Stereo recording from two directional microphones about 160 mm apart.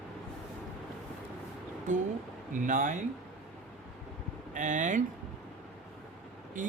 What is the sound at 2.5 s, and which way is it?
Speech, 55° right (ahead or behind).